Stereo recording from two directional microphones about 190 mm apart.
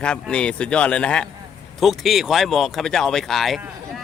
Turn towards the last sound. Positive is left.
turn(degrees=0)  # may be behind; listen again after turning